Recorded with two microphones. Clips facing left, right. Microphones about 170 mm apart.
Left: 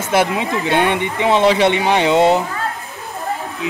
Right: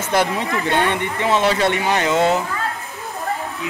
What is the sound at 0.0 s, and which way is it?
Speech, 5° left (ahead or behind).